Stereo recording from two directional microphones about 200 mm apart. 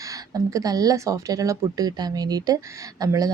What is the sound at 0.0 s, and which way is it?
Speech, 15° right (ahead or behind).